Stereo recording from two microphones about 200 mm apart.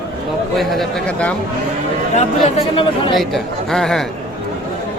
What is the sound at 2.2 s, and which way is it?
Speech, 30° left (ahead or behind).